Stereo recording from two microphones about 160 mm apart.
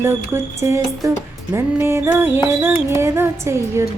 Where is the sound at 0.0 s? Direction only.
15° right (ahead or behind).